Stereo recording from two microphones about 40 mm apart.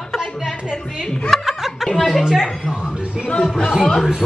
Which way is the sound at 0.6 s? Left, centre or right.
Centre.